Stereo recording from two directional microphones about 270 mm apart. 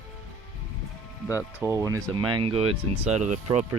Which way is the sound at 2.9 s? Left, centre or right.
Right.